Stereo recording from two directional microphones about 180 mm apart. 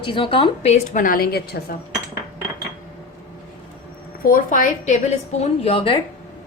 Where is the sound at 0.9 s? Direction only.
50° left (ahead or behind).